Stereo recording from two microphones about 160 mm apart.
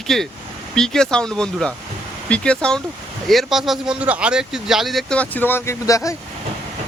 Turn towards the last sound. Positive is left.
turn(degrees=20)  # may be behind; listen again after turning